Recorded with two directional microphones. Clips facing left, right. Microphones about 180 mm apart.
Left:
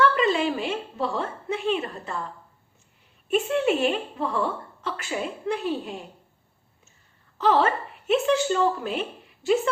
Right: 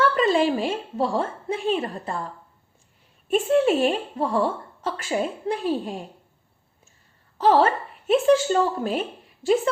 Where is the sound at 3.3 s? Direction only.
40° right (ahead or behind).